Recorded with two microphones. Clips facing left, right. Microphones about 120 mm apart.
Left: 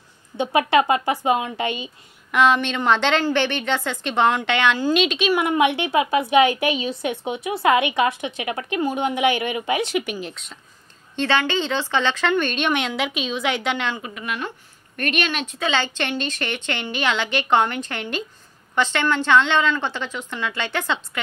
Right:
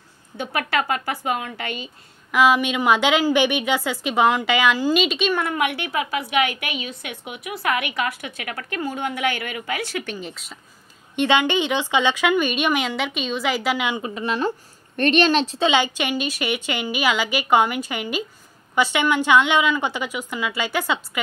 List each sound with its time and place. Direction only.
0.4 s a woman's voice: 20° left (ahead or behind)
2.3 s a woman's voice: 5° right (ahead or behind)
5.3 s a woman's voice: 20° left (ahead or behind)
10.1 s speech: centre (ahead or behind)
11.1 s a woman's voice: 15° right (ahead or behind)
13.9 s a woman's voice: 30° right (ahead or behind)
15.7 s a woman's voice: 10° right (ahead or behind)